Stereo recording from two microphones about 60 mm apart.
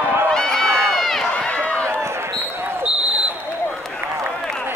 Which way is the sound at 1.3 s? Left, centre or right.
Left.